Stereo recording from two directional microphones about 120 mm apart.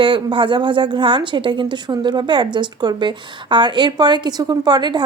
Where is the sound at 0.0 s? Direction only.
45° right (ahead or behind).